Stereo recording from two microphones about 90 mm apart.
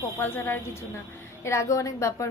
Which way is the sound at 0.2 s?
25° left (ahead or behind).